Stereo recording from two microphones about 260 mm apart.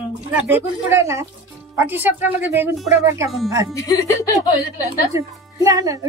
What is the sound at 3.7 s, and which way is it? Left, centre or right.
Speech, centre.